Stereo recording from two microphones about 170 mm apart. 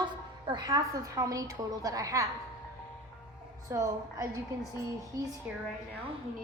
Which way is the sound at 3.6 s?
20° right (ahead or behind).